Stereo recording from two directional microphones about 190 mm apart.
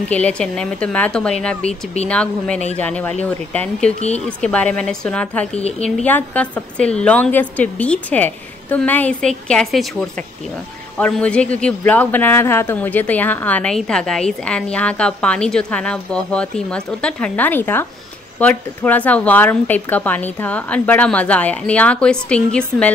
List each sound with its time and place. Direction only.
0.1 s a woman's voice: 5° left (ahead or behind)
5.5 s a woman's voice: 35° left (ahead or behind)
5.9 s a woman's voice: 5° left (ahead or behind)